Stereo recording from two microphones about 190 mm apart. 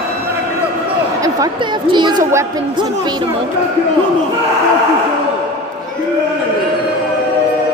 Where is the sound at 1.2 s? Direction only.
20° right (ahead or behind).